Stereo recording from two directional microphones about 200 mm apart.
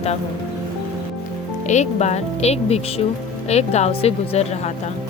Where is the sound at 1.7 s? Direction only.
35° left (ahead or behind).